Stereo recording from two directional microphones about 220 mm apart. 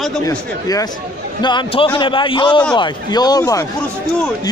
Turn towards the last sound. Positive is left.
turn(degrees=15)  # may be behind; listen again after turning